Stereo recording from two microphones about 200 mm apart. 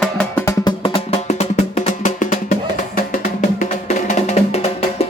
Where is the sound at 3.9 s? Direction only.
35° left (ahead or behind).